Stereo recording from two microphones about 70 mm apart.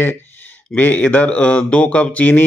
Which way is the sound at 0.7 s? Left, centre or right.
Left.